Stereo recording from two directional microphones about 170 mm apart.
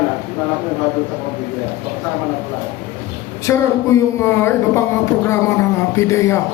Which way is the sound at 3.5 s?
15° left (ahead or behind).